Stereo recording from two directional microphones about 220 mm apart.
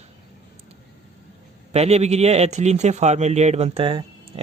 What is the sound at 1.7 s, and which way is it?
Speech, 30° right (ahead or behind).